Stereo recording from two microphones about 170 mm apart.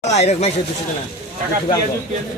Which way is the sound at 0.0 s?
40° left (ahead or behind).